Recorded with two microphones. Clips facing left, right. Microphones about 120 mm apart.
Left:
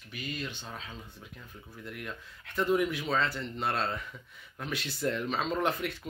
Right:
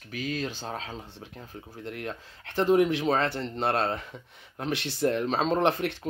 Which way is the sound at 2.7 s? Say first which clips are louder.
Right 7 dB; 65° right (ahead or behind).